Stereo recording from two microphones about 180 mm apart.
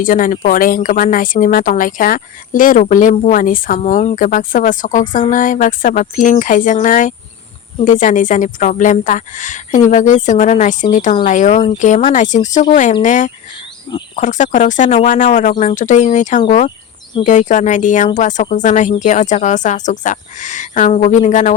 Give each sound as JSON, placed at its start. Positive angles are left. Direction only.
{"t": 0.0, "sound": "speech", "side_deg": 50}